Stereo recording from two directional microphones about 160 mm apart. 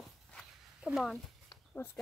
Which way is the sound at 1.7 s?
10° left (ahead or behind).